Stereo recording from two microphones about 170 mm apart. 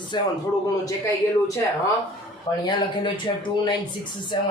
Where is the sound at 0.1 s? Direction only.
25° left (ahead or behind).